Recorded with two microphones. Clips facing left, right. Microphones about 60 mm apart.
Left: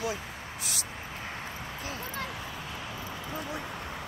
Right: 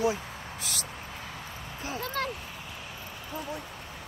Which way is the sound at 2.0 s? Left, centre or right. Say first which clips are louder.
Right 7 dB; right.